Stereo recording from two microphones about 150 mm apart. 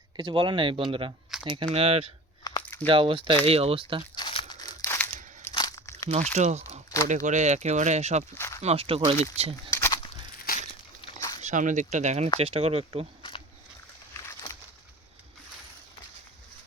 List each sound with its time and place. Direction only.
0.2 s speech: 30° right (ahead or behind)
2.4 s a sound: 30° left (ahead or behind)
2.8 s speech: 35° right (ahead or behind)
4.1 s crumpling: 35° left (ahead or behind)
4.8 s crumpling: 15° left (ahead or behind)
5.5 s crunch: 25° left (ahead or behind)
6.3 s speech: 50° right (ahead or behind)
8.4 s speech: 20° left (ahead or behind)
8.6 s speech: 40° right (ahead or behind)
9.6 s crumpling: 20° left (ahead or behind)
10.3 s a sound: 85° left
11.3 s speech: 55° right (ahead or behind)
14.1 s a sound: 20° left (ahead or behind)